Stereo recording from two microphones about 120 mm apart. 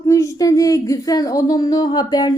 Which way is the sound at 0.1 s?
30° left (ahead or behind).